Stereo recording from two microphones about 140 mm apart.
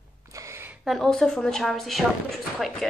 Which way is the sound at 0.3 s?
20° right (ahead or behind).